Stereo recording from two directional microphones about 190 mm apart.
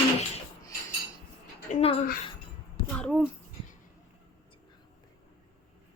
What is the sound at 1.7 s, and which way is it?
Speech, 30° left (ahead or behind).